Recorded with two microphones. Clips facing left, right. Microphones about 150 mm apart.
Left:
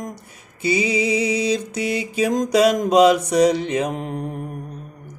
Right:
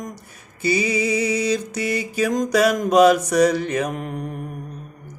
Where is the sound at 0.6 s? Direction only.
25° left (ahead or behind).